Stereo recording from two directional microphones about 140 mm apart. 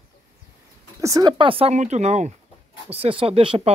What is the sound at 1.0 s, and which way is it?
Speech, 25° right (ahead or behind).